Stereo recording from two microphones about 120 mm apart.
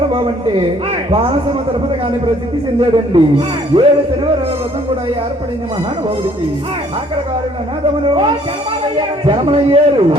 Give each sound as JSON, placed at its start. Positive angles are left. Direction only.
{"t": 0.2, "sound": "a man's voice", "side_deg": -45}
{"t": 2.8, "sound": "a man's voice", "side_deg": -45}
{"t": 8.0, "sound": "a man's voice", "side_deg": -45}